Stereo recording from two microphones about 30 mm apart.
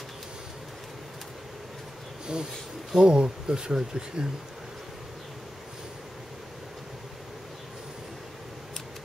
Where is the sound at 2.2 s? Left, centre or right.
Right.